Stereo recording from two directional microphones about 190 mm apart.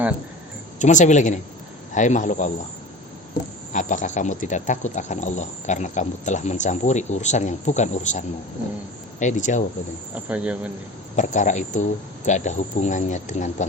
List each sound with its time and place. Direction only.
0.8 s speech: 40° left (ahead or behind)
3.7 s speech: 40° left (ahead or behind)
10.2 s a man's voice: 5° right (ahead or behind)
11.2 s speech: 40° left (ahead or behind)